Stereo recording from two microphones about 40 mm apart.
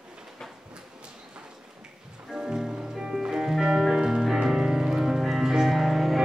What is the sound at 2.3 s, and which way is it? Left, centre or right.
Music, centre.